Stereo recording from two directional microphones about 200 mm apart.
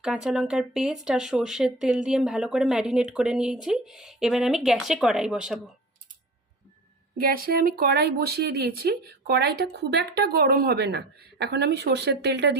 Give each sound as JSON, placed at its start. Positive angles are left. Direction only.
{"t": 0.0, "sound": "speech", "side_deg": -5}
{"t": 7.2, "sound": "speech", "side_deg": -45}